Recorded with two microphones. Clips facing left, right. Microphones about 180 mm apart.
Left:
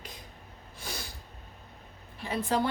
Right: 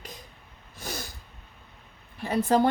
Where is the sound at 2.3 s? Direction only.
45° right (ahead or behind).